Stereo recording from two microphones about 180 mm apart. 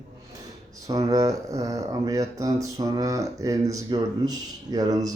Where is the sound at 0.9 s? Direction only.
20° right (ahead or behind).